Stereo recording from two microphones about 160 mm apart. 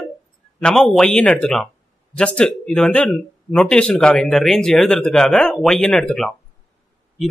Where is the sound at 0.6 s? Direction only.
5° left (ahead or behind).